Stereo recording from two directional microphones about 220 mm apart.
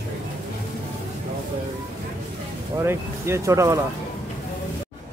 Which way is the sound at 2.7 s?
10° right (ahead or behind).